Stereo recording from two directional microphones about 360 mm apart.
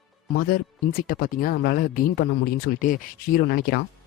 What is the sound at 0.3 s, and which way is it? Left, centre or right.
Speech, left.